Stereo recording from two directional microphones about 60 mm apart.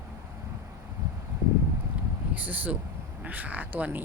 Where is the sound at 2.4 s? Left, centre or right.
Right.